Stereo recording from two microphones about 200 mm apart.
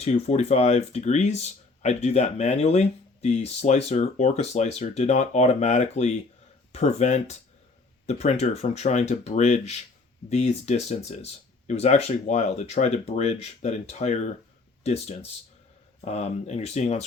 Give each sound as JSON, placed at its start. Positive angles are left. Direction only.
{"t": 0.0, "sound": "speech", "side_deg": 35}